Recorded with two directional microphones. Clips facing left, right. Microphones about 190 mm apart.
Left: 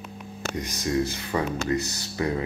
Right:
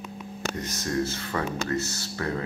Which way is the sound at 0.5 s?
15° left (ahead or behind).